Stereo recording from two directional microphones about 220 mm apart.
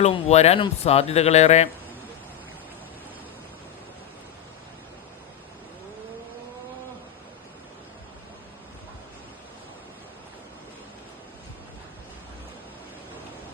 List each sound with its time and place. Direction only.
0.0 s speech: 30° left (ahead or behind)